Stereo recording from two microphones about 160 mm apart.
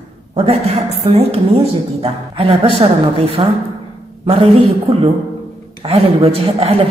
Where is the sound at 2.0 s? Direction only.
35° right (ahead or behind).